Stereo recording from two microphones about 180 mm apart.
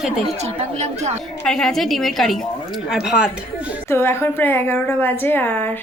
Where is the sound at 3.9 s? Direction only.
15° left (ahead or behind).